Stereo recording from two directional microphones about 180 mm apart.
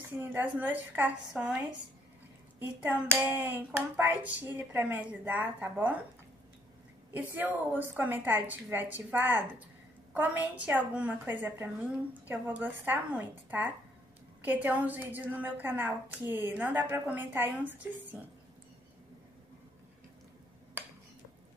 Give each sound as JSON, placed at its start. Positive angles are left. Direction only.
{"t": 0.2, "sound": "a woman's voice", "side_deg": -10}
{"t": 2.6, "sound": "a woman's voice", "side_deg": -10}
{"t": 7.2, "sound": "a woman's voice", "side_deg": -10}
{"t": 17.7, "sound": "speech", "side_deg": -90}